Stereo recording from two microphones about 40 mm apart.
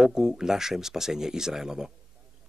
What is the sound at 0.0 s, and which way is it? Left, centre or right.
Speech, centre.